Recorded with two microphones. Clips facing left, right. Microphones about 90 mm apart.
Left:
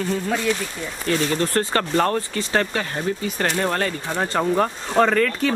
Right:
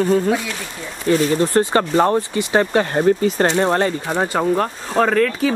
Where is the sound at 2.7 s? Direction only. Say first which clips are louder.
Right 9 dB; 35° right (ahead or behind).